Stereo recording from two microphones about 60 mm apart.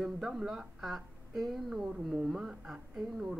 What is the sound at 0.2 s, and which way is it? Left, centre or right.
A woman's voice, centre.